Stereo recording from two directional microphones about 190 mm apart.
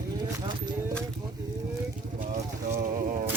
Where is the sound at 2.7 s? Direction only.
45° right (ahead or behind).